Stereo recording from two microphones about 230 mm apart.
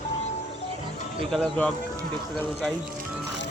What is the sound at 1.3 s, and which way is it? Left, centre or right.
Speech, centre.